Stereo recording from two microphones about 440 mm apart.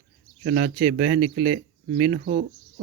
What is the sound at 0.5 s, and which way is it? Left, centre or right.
Speech, centre.